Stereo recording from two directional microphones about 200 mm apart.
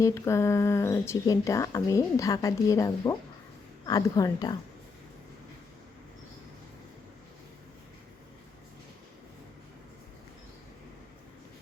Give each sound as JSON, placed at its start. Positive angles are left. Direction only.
{"t": 0.0, "sound": "speech", "side_deg": 15}